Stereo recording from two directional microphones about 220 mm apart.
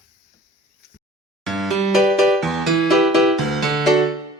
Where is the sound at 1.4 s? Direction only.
Centre (ahead or behind).